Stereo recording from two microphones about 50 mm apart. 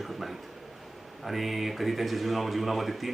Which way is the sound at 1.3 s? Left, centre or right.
Centre.